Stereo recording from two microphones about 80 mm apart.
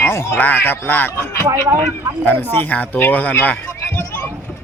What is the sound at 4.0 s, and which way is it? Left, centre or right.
Boat, left.